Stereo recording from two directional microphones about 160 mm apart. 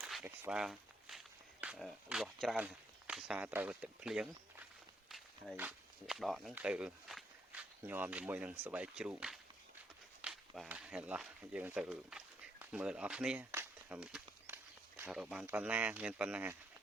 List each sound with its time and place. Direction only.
0.0 s walk: 5° right (ahead or behind)
1.6 s speech: 5° right (ahead or behind)
5.0 s walk: centre (ahead or behind)
5.5 s speech: 5° right (ahead or behind)